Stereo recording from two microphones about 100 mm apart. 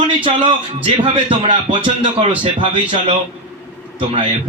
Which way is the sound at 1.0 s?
55° right (ahead or behind).